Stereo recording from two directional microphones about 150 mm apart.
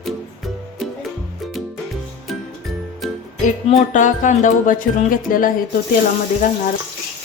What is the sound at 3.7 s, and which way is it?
Speech, 55° left (ahead or behind).